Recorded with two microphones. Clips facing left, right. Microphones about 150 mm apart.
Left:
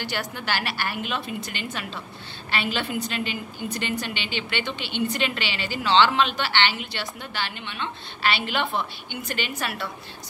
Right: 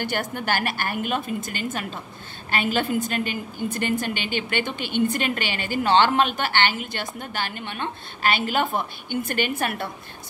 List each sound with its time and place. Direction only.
0.0 s a woman's voice: 50° right (ahead or behind)